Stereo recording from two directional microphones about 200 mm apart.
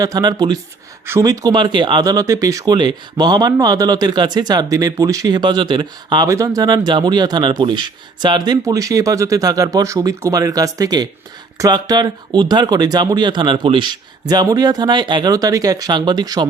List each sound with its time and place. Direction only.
0.0 s speech: 20° right (ahead or behind)